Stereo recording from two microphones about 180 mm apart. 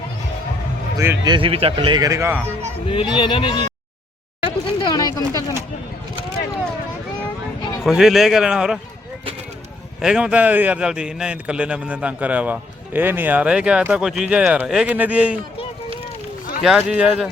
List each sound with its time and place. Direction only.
1.2 s speech: 25° right (ahead or behind)
2.9 s speech: 30° left (ahead or behind)
4.4 s a sound: 25° left (ahead or behind)
7.9 s a man's voice: centre (ahead or behind)
10.0 s a man's voice: 5° right (ahead or behind)
16.6 s a man's voice: 5° right (ahead or behind)